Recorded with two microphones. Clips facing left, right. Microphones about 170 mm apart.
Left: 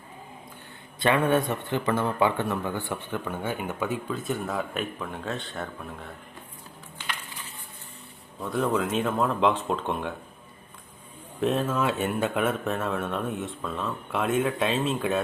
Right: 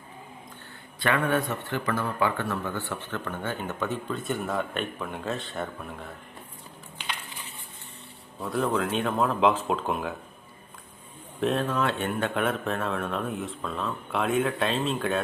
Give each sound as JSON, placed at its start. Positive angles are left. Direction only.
{"t": 0.9, "sound": "a man's voice", "side_deg": 20}
{"t": 8.4, "sound": "a man's voice", "side_deg": 0}
{"t": 11.3, "sound": "a man's voice", "side_deg": 0}